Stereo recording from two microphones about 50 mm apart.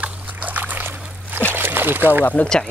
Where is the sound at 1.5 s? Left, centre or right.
Right.